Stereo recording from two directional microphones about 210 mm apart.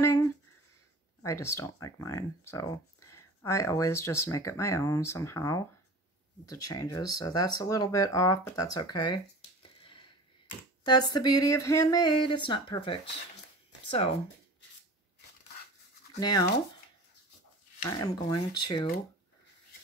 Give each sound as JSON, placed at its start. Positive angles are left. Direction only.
{"t": 0.0, "sound": "a sound", "side_deg": 15}
{"t": 1.2, "sound": "speech", "side_deg": 15}
{"t": 16.2, "sound": "speech", "side_deg": 20}
{"t": 17.8, "sound": "speech", "side_deg": 20}